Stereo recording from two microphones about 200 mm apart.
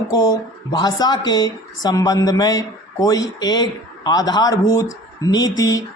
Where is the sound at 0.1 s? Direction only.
20° left (ahead or behind).